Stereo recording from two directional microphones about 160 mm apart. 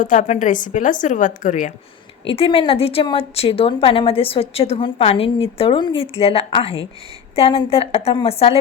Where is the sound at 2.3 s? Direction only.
35° left (ahead or behind).